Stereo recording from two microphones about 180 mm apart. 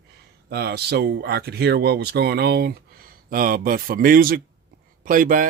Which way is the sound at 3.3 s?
55° right (ahead or behind).